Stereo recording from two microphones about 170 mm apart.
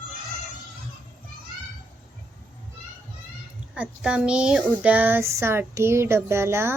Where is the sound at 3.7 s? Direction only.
5° right (ahead or behind).